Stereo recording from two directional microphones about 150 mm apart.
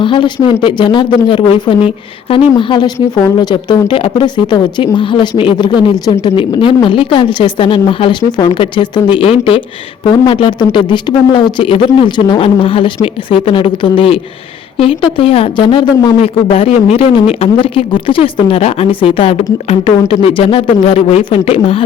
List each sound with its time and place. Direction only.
0.0 s speech: 35° left (ahead or behind)